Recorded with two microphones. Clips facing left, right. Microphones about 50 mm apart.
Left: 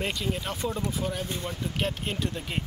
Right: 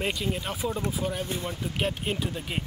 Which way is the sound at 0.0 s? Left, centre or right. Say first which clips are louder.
Right 1 dB; centre.